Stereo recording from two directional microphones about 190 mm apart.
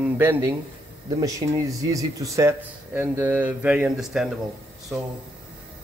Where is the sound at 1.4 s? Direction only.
25° right (ahead or behind); by 4.3 s 5° right (ahead or behind).